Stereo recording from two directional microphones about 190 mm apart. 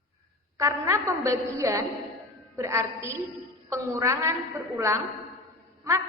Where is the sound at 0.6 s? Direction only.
15° right (ahead or behind).